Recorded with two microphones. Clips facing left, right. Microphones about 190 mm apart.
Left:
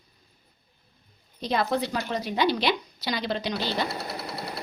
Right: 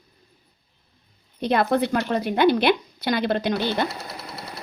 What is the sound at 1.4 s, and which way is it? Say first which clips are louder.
Speech: right 5 dB; 55° right (ahead or behind).